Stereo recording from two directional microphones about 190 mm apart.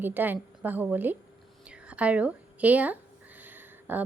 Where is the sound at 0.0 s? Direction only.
10° right (ahead or behind).